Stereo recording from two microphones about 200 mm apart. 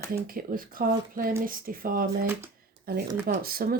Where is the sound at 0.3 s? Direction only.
45° right (ahead or behind).